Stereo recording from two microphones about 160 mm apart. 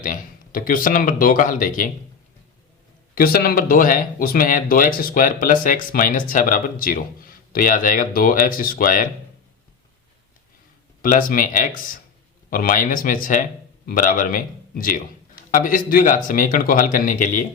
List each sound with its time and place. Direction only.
0.0 s speech: 60° left (ahead or behind)
3.2 s speech: 70° left (ahead or behind)
11.0 s a man's voice: 60° left (ahead or behind)